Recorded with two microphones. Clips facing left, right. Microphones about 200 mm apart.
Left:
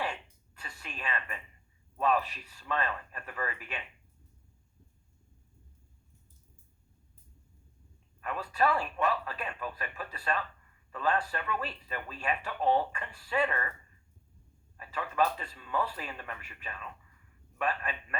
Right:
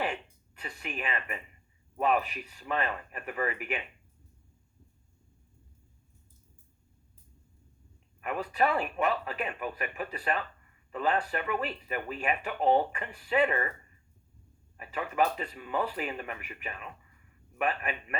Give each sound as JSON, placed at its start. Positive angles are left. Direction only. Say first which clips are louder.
{"t": 0.0, "sound": "a sound", "louder": "right 3 dB", "side_deg": -20}
{"t": 2.0, "sound": "speech", "louder": "right 1 dB", "side_deg": -20}
{"t": 8.2, "sound": "speech", "louder": "right 1 dB", "side_deg": -20}
{"t": 14.8, "sound": "speech", "louder": "right 1 dB", "side_deg": -20}